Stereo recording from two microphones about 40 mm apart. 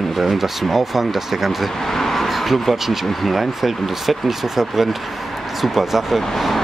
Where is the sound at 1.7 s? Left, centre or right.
Centre.